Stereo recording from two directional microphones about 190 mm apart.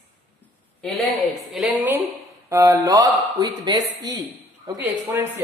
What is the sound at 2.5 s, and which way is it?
Speech, 15° right (ahead or behind).